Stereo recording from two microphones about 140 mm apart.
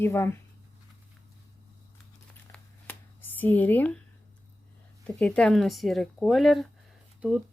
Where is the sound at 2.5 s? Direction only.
15° left (ahead or behind).